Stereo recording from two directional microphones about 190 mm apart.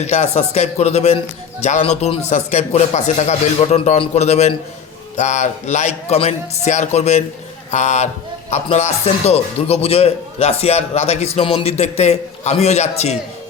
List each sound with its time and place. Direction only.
0.0 s speech: 35° left (ahead or behind)